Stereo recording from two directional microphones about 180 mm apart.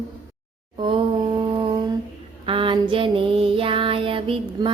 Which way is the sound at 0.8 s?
30° right (ahead or behind).